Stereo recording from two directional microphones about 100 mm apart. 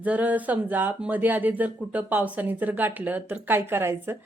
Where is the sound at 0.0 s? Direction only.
15° right (ahead or behind).